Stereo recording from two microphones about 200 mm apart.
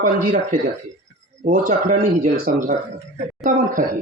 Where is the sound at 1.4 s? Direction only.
40° right (ahead or behind).